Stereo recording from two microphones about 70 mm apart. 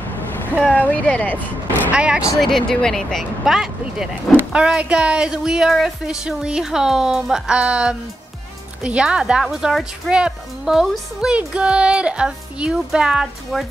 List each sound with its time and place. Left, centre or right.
0.7 s speech: centre
1.9 s speech: centre
2.3 s speech: centre
3.5 s speech: centre